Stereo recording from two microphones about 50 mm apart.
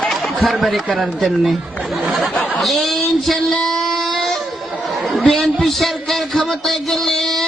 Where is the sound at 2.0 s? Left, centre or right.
Centre.